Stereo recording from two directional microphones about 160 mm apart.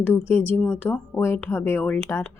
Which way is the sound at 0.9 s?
15° left (ahead or behind).